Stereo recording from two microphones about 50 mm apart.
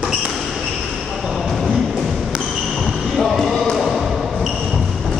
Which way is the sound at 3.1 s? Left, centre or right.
Centre.